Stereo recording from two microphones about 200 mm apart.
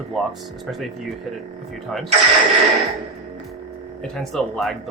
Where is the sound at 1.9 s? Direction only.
Centre (ahead or behind).